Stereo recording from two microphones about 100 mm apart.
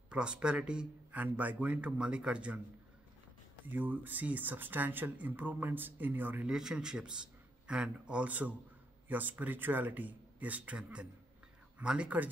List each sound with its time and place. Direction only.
0.1 s speech: 10° right (ahead or behind)
3.6 s speech: 15° right (ahead or behind)
6.5 s a man's voice: 5° right (ahead or behind)